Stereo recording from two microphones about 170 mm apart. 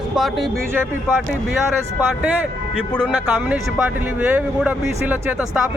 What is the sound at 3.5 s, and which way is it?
Speech, 10° right (ahead or behind).